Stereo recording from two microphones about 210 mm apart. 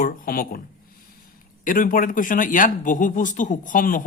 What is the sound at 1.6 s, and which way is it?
Speech, 40° left (ahead or behind).